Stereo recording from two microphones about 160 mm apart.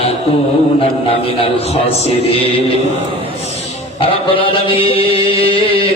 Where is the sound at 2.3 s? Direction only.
35° left (ahead or behind).